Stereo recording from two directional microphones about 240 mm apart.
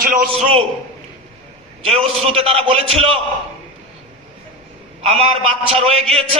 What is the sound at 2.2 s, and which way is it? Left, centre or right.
Speech, right.